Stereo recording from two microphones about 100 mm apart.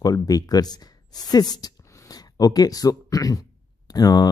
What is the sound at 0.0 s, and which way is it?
Speech, 35° left (ahead or behind).